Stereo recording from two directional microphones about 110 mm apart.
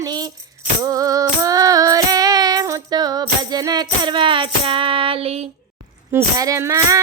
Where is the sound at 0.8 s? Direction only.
30° right (ahead or behind).